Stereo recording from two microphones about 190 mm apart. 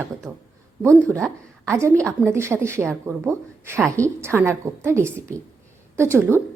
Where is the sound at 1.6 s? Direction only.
15° right (ahead or behind).